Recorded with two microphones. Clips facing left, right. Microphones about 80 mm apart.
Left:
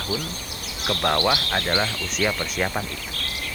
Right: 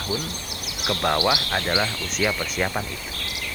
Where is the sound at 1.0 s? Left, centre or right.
Centre.